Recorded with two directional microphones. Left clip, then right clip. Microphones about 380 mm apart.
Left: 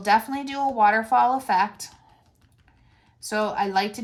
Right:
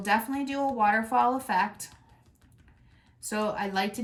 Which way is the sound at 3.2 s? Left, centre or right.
Centre.